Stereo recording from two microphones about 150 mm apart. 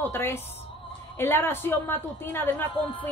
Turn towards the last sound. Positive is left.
turn(degrees=15)  # may be behind; listen again after turning